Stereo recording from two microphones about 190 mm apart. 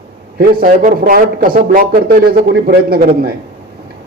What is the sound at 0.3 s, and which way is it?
A man's voice, 45° right (ahead or behind).